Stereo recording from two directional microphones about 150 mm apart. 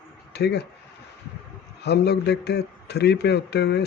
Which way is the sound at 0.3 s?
90° left.